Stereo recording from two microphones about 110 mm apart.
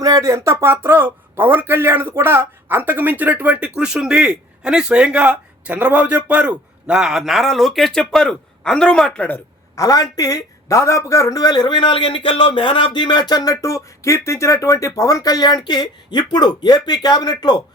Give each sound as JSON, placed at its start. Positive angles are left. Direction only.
{"t": 0.0, "sound": "speech", "side_deg": -35}
{"t": 9.7, "sound": "a man's voice", "side_deg": 35}